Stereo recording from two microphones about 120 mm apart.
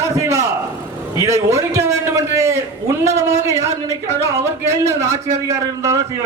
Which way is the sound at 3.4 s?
25° right (ahead or behind).